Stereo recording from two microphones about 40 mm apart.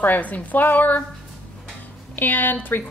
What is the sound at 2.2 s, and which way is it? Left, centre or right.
Speech, left.